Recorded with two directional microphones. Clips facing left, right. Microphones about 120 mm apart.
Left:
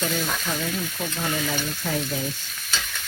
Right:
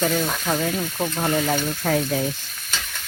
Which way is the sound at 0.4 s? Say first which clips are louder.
Right 5 dB; 50° right (ahead or behind).